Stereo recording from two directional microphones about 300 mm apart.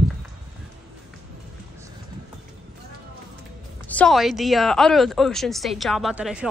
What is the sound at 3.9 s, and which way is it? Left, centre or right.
A woman's voice, centre.